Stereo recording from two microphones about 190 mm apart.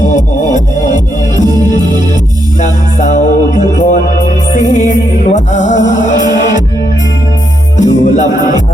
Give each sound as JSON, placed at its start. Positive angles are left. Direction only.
{"t": 0.2, "sound": "music", "side_deg": 40}
{"t": 2.6, "sound": "music", "side_deg": 40}
{"t": 7.8, "sound": "music", "side_deg": 40}